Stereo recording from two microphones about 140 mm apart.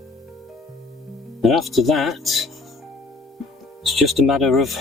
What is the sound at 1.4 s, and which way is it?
Speech, centre (ahead or behind).